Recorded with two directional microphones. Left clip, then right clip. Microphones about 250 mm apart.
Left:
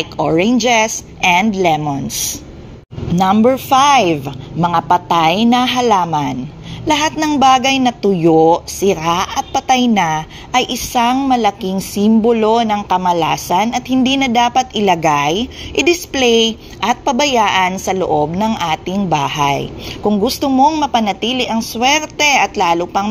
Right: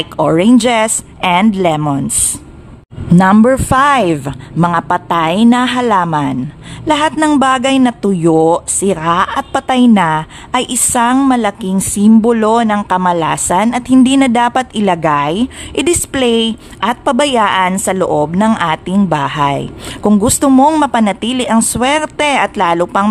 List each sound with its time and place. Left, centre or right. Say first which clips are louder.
0.0 s speech: right 3 dB; centre
3.4 s speech: right 1 dB; centre
20.0 s speech: right 3 dB; right